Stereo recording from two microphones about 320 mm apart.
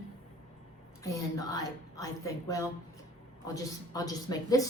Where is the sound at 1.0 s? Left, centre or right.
Centre.